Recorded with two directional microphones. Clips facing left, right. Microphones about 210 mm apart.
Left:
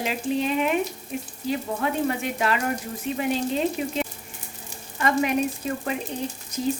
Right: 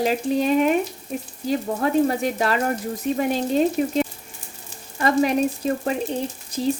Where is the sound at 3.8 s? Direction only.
40° right (ahead or behind).